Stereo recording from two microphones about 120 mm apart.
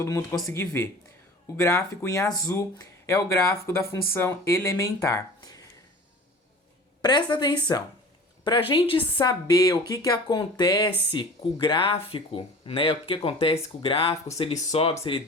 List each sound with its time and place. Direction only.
0.4 s speech: 25° left (ahead or behind)
7.0 s a woman's voice: 40° left (ahead or behind); by 14.9 s 60° left (ahead or behind)